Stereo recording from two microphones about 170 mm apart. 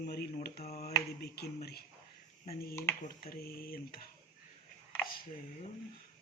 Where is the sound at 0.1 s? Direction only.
65° left (ahead or behind).